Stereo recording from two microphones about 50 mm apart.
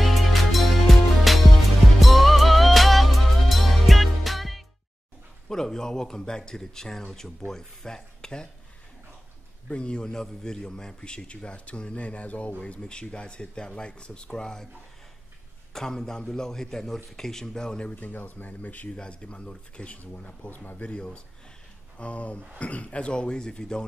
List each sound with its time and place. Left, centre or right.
0.0 s music: centre
5.5 s a man's voice: centre
9.7 s a man's voice: left
15.7 s a man's voice: centre
17.9 s speech: left
18.9 s a man's voice: centre
20.0 s a man's voice: left; by 23.8 s centre